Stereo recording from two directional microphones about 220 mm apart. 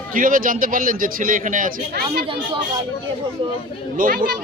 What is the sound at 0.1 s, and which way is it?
A man's voice, 40° right (ahead or behind).